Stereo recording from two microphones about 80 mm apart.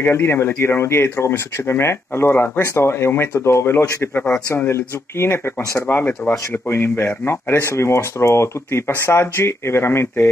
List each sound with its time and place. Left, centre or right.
0.0 s speech: left
4.6 s speech: left